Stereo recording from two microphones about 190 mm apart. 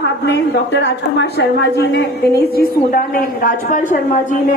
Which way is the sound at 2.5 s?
50° left (ahead or behind).